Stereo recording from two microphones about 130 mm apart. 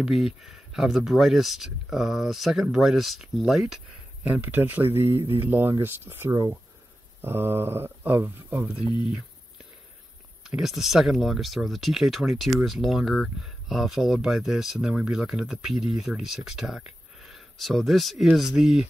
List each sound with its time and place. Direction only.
0.0 s speech: centre (ahead or behind)
10.4 s speech: 5° right (ahead or behind)